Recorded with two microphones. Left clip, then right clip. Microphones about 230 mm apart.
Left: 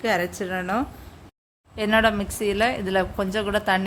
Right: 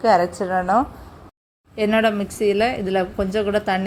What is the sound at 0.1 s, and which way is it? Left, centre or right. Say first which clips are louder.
Speech: right 9 dB; centre.